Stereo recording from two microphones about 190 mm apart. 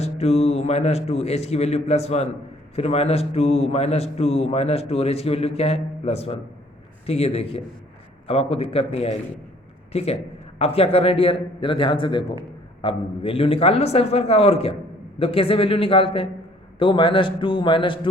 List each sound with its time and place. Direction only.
0.0 s a man's voice: 35° left (ahead or behind)